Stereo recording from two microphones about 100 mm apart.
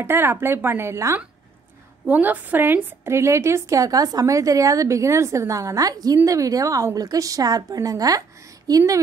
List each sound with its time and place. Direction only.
0.0 s speech: 25° right (ahead or behind)
2.0 s a woman's voice: 15° right (ahead or behind); by 8.9 s 35° right (ahead or behind)